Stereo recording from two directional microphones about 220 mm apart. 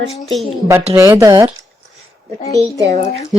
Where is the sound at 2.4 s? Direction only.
15° left (ahead or behind).